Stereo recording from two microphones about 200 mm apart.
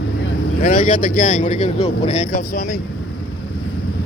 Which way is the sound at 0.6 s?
40° left (ahead or behind).